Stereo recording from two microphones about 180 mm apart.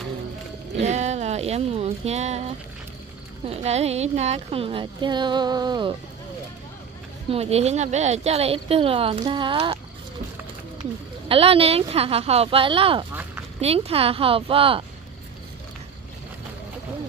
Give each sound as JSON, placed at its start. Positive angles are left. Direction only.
{"t": 0.7, "sound": "a woman's voice", "side_deg": -40}
{"t": 3.4, "sound": "a woman's voice", "side_deg": -35}
{"t": 7.2, "sound": "a woman's voice", "side_deg": -35}
{"t": 11.2, "sound": "a woman's voice", "side_deg": -30}